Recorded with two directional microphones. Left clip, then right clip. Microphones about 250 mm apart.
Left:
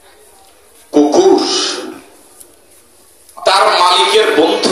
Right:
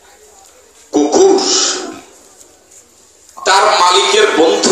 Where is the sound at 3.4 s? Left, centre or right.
Left.